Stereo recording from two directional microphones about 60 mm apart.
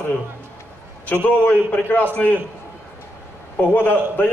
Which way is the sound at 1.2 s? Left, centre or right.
Left.